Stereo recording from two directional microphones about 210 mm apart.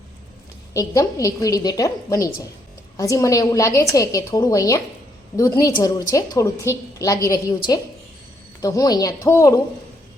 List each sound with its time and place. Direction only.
0.7 s a woman's voice: 15° left (ahead or behind)
8.6 s a woman's voice: 15° left (ahead or behind)